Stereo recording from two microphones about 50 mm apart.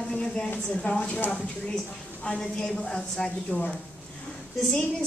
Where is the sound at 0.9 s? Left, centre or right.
Left.